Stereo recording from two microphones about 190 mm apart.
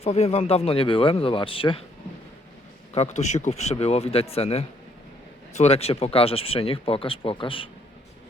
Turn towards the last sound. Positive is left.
turn(degrees=25)  # may be behind; listen again after turning